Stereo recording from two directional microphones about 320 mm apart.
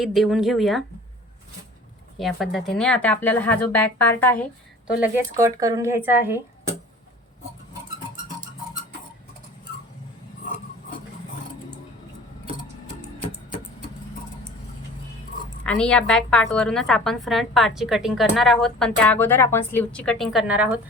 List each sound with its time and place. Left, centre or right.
0.0 s a woman's voice: centre
2.1 s a woman's voice: centre
4.9 s speech: centre
15.6 s a woman's voice: centre